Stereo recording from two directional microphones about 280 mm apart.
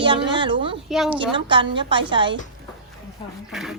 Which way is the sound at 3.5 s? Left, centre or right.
Centre.